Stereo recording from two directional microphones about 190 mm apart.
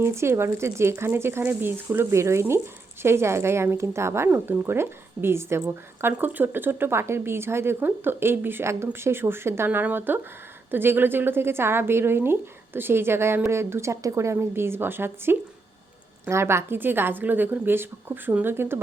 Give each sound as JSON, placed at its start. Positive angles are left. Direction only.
{"t": 0.0, "sound": "a woman's voice", "side_deg": -15}